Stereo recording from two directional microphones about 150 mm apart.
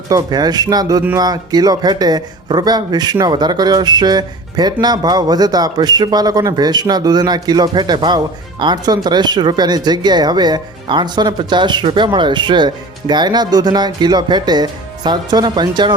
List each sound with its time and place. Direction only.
0.1 s speech: 25° right (ahead or behind)